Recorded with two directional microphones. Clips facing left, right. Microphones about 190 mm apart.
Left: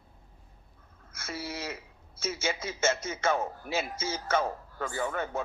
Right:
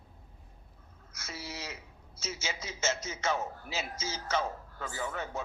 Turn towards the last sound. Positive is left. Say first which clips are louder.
# left 5 dB
turn(degrees=55)  # may be behind; listen again after turning